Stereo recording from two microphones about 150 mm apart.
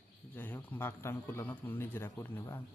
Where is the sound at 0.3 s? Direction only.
10° left (ahead or behind).